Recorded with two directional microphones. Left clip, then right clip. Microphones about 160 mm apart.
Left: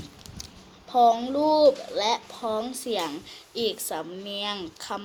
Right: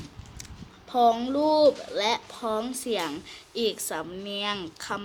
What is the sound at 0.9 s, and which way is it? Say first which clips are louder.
A child's voice: left 2 dB; 65° right (ahead or behind).